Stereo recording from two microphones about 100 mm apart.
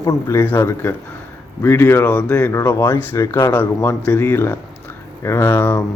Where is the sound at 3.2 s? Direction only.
30° left (ahead or behind).